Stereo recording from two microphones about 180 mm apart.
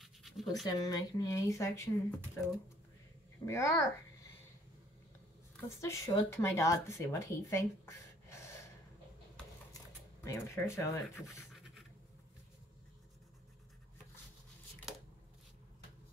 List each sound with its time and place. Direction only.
0.0 s pant: centre (ahead or behind)
0.7 s a child's voice: 20° left (ahead or behind)
5.8 s speech: 15° left (ahead or behind)
9.7 s a sound: 20° left (ahead or behind)